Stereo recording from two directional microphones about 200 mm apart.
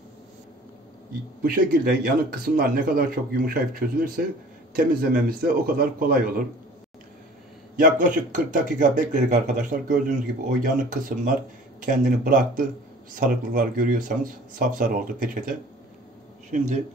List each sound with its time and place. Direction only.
1.4 s speech: 45° right (ahead or behind)
7.7 s a man's voice: 45° right (ahead or behind)